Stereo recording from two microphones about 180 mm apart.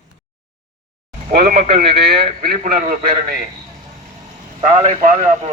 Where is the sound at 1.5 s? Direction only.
60° right (ahead or behind).